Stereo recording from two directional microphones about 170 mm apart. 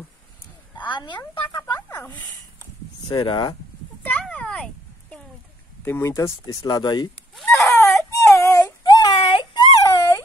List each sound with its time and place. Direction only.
0.8 s speech: 30° left (ahead or behind)
1.8 s a sound: 20° left (ahead or behind)
2.0 s speech: 10° left (ahead or behind)
3.1 s speech: 25° left (ahead or behind)
4.0 s a sound: 10° left (ahead or behind)
5.9 s speech: 15° left (ahead or behind)
7.5 s baby cry: 15° left (ahead or behind)